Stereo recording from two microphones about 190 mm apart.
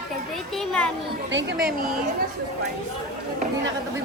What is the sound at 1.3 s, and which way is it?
Speech, 70° right (ahead or behind).